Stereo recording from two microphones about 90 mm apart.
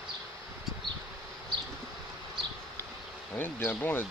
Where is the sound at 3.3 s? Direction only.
20° left (ahead or behind).